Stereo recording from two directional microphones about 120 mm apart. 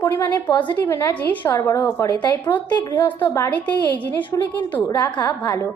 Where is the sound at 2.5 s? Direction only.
40° left (ahead or behind).